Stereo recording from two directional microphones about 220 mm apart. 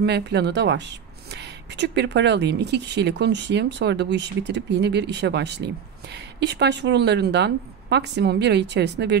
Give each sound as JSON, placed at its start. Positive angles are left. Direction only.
{"t": 0.0, "sound": "speech", "side_deg": -50}